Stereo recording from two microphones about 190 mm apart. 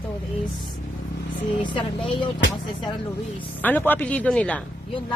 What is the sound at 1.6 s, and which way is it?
Speech, 25° left (ahead or behind).